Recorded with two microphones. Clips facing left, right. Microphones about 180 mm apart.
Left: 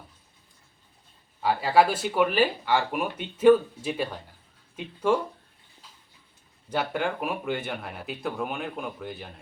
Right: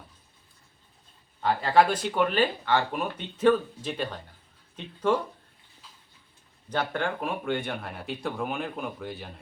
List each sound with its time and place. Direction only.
1.4 s speech: 5° left (ahead or behind)
6.7 s speech: 10° left (ahead or behind)